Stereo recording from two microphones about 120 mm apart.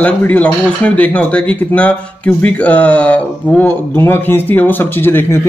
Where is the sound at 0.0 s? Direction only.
15° left (ahead or behind).